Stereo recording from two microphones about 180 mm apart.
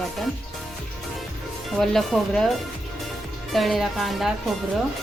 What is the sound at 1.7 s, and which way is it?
Speech, centre (ahead or behind).